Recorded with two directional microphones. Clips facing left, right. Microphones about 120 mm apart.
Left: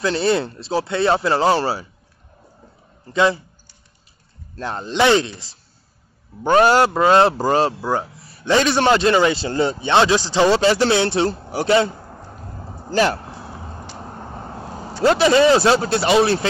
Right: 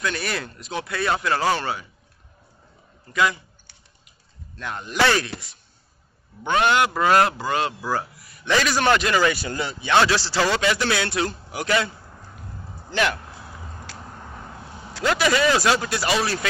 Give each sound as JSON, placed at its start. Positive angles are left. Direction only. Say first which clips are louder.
{"t": 0.0, "sound": "a man's voice", "louder": "left 9 dB", "side_deg": 25}
{"t": 3.1, "sound": "a man's voice", "louder": "left 5 dB", "side_deg": 30}
{"t": 4.6, "sound": "a man's voice", "louder": "left 5 dB", "side_deg": 35}
{"t": 4.9, "sound": "a man's voice", "louder": "left 5 dB", "side_deg": 20}
{"t": 6.4, "sound": "a man's voice", "louder": "left 6 dB", "side_deg": 35}
{"t": 6.9, "sound": "a man's voice", "louder": "left 5 dB", "side_deg": 25}
{"t": 7.3, "sound": "a man's voice", "louder": "left 7 dB", "side_deg": 35}
{"t": 7.8, "sound": "a man's voice", "louder": "left 4 dB", "side_deg": 20}
{"t": 12.9, "sound": "a sound", "louder": "left 6 dB", "side_deg": 35}